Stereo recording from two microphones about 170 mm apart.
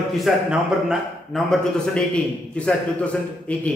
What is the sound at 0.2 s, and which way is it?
A man's voice, centre (ahead or behind).